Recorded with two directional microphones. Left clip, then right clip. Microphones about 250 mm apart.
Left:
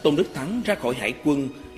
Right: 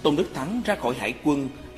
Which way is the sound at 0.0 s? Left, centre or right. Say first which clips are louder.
Left 2 dB; left.